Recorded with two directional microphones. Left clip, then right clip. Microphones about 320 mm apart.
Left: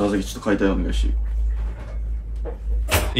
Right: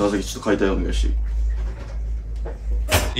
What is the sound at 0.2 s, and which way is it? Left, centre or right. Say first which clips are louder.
Speech: right 1 dB; centre.